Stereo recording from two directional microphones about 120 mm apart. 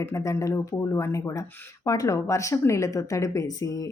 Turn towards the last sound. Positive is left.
turn(degrees=25)  # may be behind; listen again after turning